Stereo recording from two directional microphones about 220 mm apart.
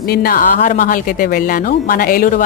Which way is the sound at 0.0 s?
45° left (ahead or behind).